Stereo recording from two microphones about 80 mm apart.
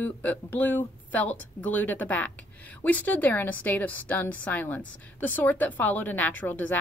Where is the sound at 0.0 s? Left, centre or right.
Left.